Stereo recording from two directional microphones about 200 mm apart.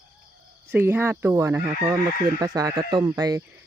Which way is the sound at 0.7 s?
10° right (ahead or behind).